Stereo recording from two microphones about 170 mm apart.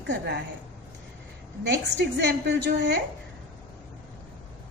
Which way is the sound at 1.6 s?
90° right.